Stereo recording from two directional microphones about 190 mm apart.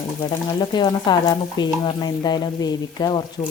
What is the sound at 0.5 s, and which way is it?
Speech, 25° left (ahead or behind).